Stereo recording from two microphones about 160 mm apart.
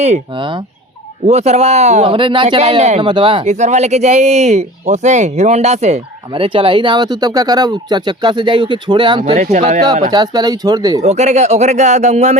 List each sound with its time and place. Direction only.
0.3 s speech: 30° right (ahead or behind)
1.3 s speech: 45° right (ahead or behind)
3.0 s speech: 30° right (ahead or behind)
3.4 s speech: 45° right (ahead or behind); by 9.2 s 30° right (ahead or behind)
9.2 s speech: 45° right (ahead or behind)
10.1 s speech: 25° right (ahead or behind)
11.0 s speech: 45° right (ahead or behind)